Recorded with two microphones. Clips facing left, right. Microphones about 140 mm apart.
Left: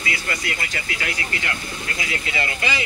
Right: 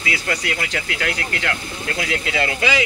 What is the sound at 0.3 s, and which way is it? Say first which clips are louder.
Speech: right 4 dB; 75° right (ahead or behind).